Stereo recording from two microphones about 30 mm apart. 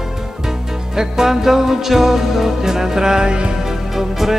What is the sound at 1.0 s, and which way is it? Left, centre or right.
Music, centre.